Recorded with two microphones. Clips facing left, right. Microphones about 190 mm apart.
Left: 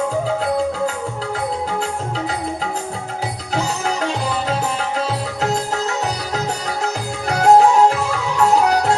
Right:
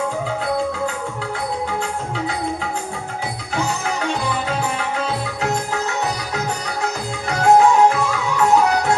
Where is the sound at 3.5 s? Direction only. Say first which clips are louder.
Left 2 dB; 40° left (ahead or behind).